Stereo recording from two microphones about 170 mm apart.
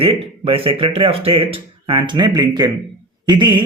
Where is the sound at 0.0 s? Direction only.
30° right (ahead or behind).